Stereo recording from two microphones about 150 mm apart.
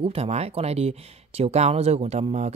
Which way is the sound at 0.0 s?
40° right (ahead or behind).